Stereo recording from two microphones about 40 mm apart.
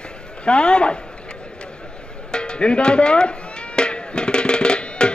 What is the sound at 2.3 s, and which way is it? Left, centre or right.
Music, left.